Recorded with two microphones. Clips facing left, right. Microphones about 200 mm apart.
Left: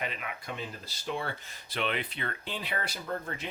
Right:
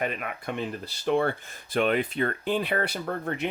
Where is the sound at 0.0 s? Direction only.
50° right (ahead or behind).